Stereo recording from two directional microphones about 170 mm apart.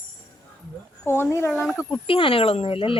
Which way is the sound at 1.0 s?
15° left (ahead or behind).